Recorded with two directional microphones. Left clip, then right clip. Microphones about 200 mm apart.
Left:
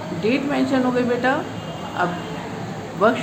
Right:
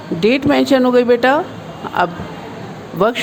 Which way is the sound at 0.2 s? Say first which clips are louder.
Right 8 dB; 55° right (ahead or behind).